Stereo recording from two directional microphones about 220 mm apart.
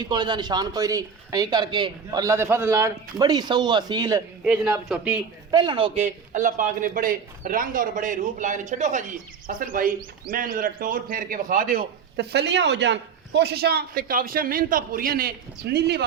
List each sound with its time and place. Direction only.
0.0 s a man's voice: 20° right (ahead or behind)
4.4 s a man's voice: 5° right (ahead or behind)
5.5 s speech: 20° right (ahead or behind); by 16.0 s 50° right (ahead or behind)